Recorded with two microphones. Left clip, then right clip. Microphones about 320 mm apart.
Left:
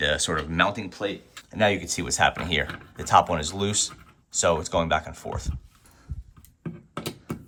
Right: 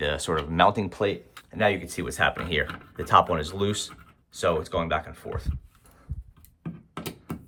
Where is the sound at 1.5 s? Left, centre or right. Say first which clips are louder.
Left 1 dB; centre.